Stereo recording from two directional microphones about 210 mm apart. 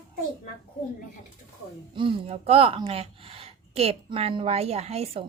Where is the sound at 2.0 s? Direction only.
25° right (ahead or behind).